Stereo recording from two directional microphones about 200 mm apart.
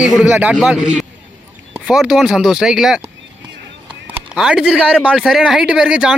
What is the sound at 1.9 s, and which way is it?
Speech, centre (ahead or behind).